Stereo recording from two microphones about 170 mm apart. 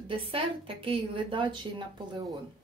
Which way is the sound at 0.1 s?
30° right (ahead or behind).